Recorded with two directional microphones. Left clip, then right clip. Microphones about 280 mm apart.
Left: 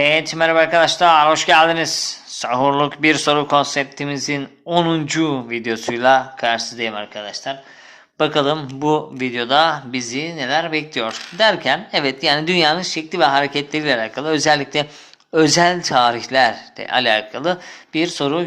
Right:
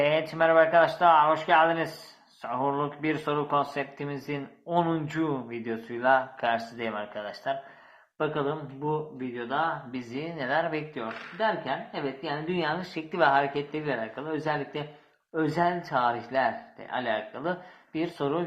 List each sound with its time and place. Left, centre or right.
0.0 s speech: left
10.1 s speech: left
10.9 s speech: left